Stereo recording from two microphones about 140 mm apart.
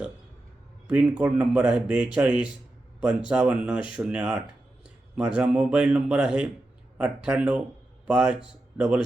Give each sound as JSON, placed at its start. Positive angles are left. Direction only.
{"t": 0.9, "sound": "a man's voice", "side_deg": -10}